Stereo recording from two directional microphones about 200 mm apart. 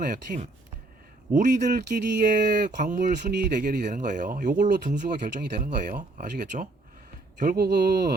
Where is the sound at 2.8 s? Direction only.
40° right (ahead or behind).